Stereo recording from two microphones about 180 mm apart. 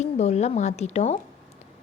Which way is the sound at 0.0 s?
35° left (ahead or behind).